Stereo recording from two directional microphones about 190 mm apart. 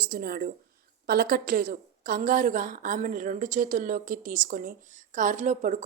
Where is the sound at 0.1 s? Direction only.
50° right (ahead or behind).